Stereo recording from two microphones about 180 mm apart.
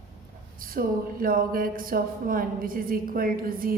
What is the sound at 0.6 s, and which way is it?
Speech, 50° right (ahead or behind).